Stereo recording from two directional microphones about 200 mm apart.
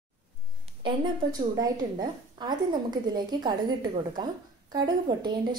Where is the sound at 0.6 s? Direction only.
25° right (ahead or behind).